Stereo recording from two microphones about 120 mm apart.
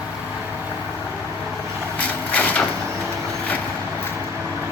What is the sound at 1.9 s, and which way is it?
Vehicle, 10° left (ahead or behind).